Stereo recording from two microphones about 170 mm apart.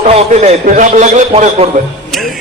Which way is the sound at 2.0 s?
Centre (ahead or behind).